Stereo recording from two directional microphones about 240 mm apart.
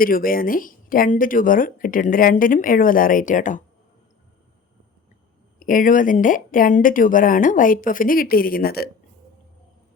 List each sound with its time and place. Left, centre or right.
0.0 s speech: left
5.5 s speech: left